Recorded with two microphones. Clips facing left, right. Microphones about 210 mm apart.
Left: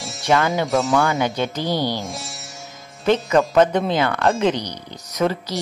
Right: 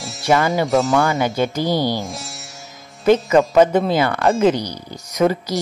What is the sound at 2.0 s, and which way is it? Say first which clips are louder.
Music: even; centre (ahead or behind).